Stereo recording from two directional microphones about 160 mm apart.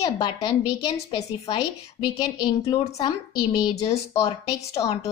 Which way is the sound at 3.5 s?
20° left (ahead or behind).